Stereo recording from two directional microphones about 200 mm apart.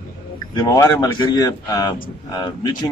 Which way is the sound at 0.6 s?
20° left (ahead or behind).